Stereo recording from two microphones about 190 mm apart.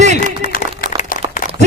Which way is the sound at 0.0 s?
35° right (ahead or behind).